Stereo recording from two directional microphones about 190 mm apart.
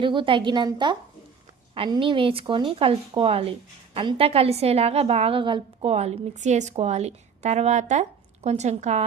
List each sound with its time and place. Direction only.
0.0 s a woman's voice: 25° right (ahead or behind)